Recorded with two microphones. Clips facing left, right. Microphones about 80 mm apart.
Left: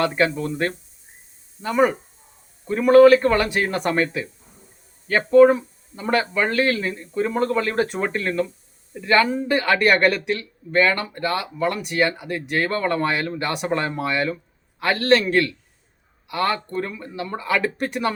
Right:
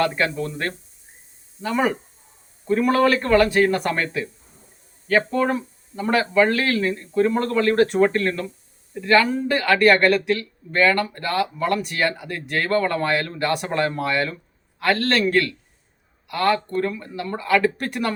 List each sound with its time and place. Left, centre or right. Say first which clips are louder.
0.1 s speech: left 3 dB; centre
0.3 s speech: left 2 dB; left
1.6 s speech: left 3 dB; centre
5.3 s speech: left 9 dB; centre